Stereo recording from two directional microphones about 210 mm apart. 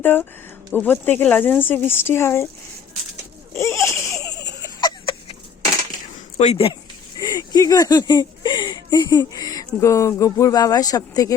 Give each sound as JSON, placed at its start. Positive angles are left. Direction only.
{"t": 0.0, "sound": "speech", "side_deg": 10}
{"t": 3.5, "sound": "a sound", "side_deg": 10}
{"t": 6.3, "sound": "speech", "side_deg": 30}
{"t": 7.2, "sound": "speech", "side_deg": 20}